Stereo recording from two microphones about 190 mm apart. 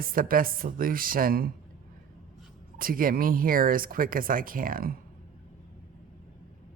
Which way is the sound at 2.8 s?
50° right (ahead or behind).